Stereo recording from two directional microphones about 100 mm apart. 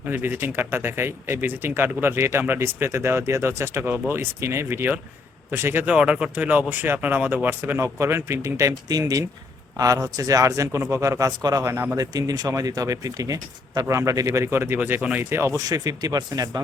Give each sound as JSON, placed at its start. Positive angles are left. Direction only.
{"t": 0.1, "sound": "speech", "side_deg": -20}
{"t": 5.9, "sound": "speech", "side_deg": -10}